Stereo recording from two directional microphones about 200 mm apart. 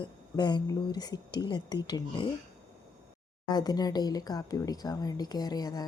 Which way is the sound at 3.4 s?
20° left (ahead or behind).